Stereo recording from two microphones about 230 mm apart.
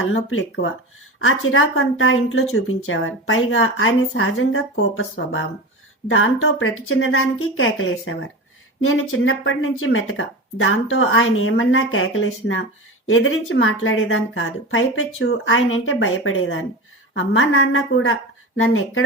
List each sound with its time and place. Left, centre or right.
0.0 s a woman's voice: left